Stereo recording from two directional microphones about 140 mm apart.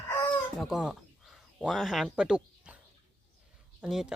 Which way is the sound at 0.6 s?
5° right (ahead or behind).